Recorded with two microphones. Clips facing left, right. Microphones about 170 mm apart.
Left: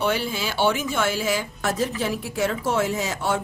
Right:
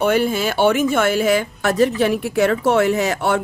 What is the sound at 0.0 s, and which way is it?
Speech, 50° right (ahead or behind).